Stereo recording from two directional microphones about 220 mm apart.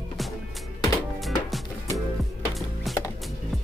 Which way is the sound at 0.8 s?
Centre (ahead or behind).